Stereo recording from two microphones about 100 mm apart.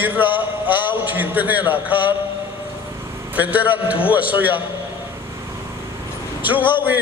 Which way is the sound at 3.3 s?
15° right (ahead or behind).